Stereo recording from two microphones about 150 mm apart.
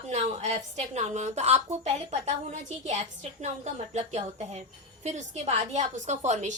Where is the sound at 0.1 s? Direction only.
45° right (ahead or behind).